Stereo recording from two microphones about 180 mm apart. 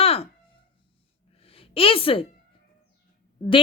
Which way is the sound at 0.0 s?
35° left (ahead or behind).